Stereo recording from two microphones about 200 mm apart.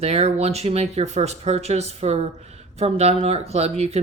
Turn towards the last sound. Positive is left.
turn(degrees=-30)  # may be behind; listen again after turning